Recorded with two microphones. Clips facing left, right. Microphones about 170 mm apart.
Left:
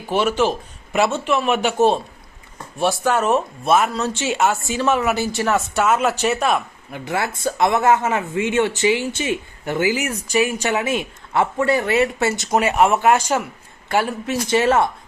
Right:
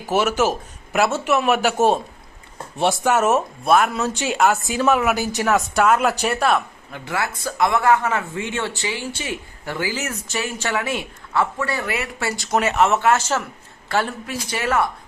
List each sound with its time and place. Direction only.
0.1 s speech: 10° right (ahead or behind)
2.7 s speech: 20° right (ahead or behind)
3.1 s speech: 10° right (ahead or behind)
4.6 s speech: 10° right (ahead or behind)
5.1 s speech: 15° right (ahead or behind)
5.5 s speech: 5° left (ahead or behind)
7.0 s speech: 25° left (ahead or behind)